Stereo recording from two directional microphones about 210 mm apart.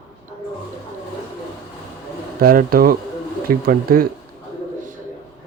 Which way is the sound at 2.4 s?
45° right (ahead or behind).